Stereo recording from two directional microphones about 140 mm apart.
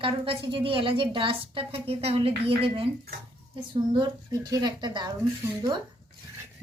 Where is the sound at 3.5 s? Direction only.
30° right (ahead or behind).